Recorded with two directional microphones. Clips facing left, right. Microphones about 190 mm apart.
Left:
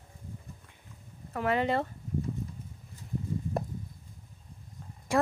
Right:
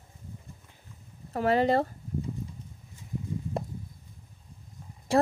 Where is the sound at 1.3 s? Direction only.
35° right (ahead or behind).